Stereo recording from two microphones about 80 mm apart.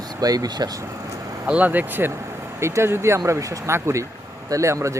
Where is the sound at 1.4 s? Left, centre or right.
Right.